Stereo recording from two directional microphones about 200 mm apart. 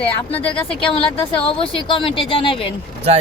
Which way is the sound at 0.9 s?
25° left (ahead or behind).